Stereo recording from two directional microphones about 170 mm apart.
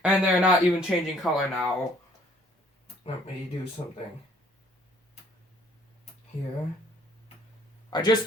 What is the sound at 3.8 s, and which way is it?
Speech, 30° left (ahead or behind).